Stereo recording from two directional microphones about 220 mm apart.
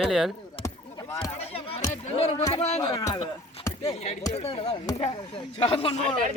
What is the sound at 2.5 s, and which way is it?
Music, 25° left (ahead or behind).